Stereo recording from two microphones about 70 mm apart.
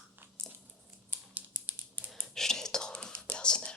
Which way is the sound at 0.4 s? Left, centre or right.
Right.